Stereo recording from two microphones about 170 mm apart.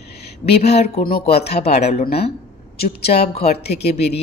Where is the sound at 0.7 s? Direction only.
35° left (ahead or behind).